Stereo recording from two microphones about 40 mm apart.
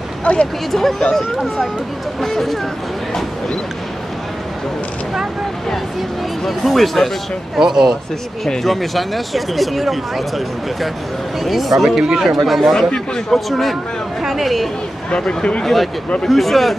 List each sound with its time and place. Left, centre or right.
0.2 s speech: left
0.7 s speech: centre
6.4 s speech: centre
7.5 s speech: centre
8.6 s speech: centre
15.0 s speech: left
15.6 s speech: centre